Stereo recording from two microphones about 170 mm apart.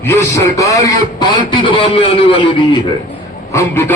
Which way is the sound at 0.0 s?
15° left (ahead or behind).